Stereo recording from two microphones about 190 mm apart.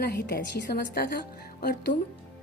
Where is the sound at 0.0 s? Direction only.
55° left (ahead or behind).